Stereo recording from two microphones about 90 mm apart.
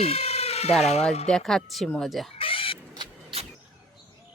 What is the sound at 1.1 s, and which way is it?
A woman's voice, 5° left (ahead or behind).